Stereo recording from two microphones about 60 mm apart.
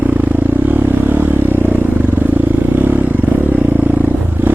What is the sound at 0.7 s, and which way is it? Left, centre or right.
Vehicle, right.